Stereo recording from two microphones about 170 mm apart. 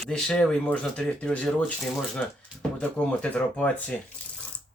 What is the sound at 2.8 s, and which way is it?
Speech, 10° left (ahead or behind).